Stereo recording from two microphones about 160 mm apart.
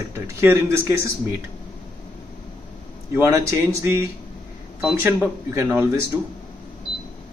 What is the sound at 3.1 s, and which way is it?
Speech, 15° right (ahead or behind).